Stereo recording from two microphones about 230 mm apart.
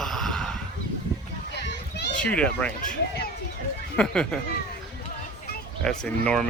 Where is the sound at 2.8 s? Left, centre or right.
Left.